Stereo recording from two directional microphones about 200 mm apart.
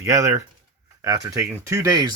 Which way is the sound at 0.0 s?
15° right (ahead or behind).